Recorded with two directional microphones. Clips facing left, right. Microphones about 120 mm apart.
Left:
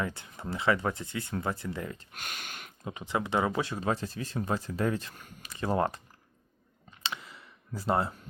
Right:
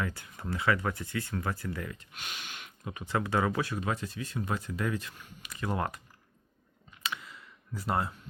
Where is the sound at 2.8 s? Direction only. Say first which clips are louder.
Even; 25° left (ahead or behind); by 5.5 s 40° left (ahead or behind).